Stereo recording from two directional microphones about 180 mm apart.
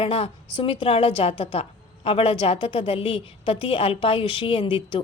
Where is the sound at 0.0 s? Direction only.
30° left (ahead or behind).